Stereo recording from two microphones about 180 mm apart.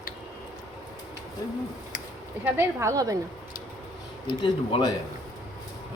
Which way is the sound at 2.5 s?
15° right (ahead or behind).